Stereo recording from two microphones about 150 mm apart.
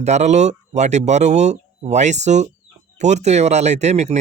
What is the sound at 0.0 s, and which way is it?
Speech, 50° right (ahead or behind).